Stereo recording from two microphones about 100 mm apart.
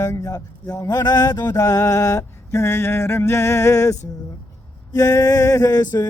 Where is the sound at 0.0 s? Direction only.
35° left (ahead or behind).